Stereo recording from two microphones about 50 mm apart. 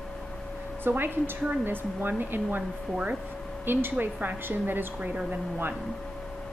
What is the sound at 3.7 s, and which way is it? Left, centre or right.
A woman's voice, right.